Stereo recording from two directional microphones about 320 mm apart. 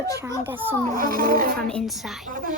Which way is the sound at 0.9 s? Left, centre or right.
Right.